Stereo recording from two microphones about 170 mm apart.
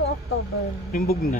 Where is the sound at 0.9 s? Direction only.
60° left (ahead or behind).